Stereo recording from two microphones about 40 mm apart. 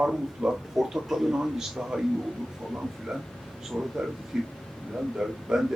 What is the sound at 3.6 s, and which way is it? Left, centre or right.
A man's voice, centre.